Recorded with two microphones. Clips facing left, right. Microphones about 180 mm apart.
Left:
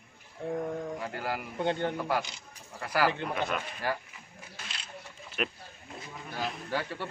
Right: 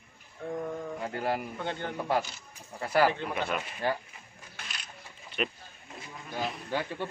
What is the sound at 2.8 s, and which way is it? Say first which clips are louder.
Speech: right 4 dB; 25° right (ahead or behind).